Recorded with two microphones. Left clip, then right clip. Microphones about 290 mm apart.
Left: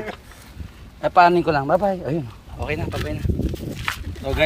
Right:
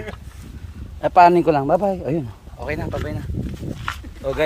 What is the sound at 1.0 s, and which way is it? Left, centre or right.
Speech, right.